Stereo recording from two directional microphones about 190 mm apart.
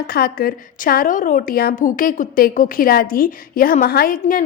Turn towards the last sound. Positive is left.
turn(degrees=50)  # may be behind; listen again after turning